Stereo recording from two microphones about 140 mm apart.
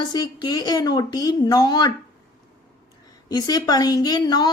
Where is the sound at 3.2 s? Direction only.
25° left (ahead or behind).